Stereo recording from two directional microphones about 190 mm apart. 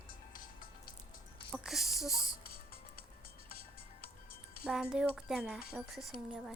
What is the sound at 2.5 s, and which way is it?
Music, 55° right (ahead or behind).